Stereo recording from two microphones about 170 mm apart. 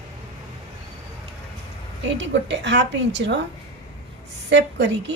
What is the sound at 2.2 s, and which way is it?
A woman's voice, 90° right.